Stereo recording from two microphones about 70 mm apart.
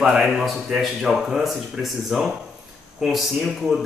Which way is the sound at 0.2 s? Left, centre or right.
Centre.